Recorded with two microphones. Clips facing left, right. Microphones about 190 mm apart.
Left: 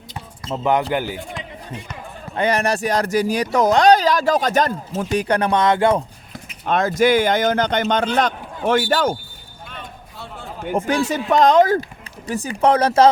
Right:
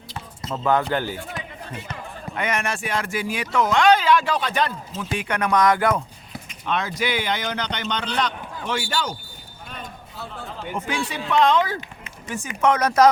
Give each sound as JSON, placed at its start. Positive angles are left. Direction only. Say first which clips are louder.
{"t": 0.1, "sound": "speech", "louder": "left 3 dB", "side_deg": 20}
{"t": 2.3, "sound": "speech", "louder": "left 7 dB", "side_deg": 35}
{"t": 6.7, "sound": "a man's voice", "louder": "left 9 dB", "side_deg": 45}
{"t": 10.6, "sound": "speech", "louder": "left 8 dB", "side_deg": 45}